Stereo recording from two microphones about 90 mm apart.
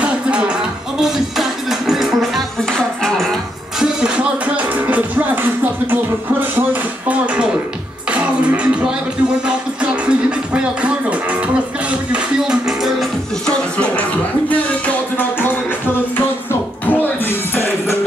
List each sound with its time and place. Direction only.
0.0 s music: 15° right (ahead or behind)
1.0 s music: centre (ahead or behind)
3.8 s music: 10° right (ahead or behind)
6.5 s a sound: 20° right (ahead or behind)
8.1 s music: 15° right (ahead or behind)
10.0 s music: 10° right (ahead or behind)
13.5 s music: 10° left (ahead or behind)
16.8 s music: 20° left (ahead or behind)